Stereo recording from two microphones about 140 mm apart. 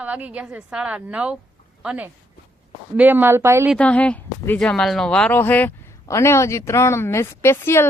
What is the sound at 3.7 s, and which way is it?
Speech, 10° left (ahead or behind).